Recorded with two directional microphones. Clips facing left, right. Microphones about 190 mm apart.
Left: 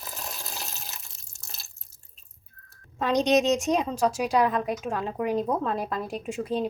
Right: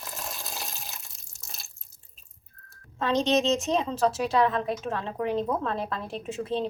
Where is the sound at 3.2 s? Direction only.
15° left (ahead or behind).